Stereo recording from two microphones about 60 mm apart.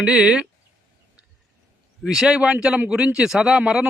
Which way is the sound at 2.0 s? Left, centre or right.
Centre.